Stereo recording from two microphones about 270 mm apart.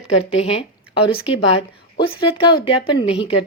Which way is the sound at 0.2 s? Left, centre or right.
Left.